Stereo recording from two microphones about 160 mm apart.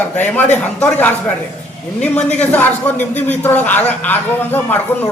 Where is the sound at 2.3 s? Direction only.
10° left (ahead or behind).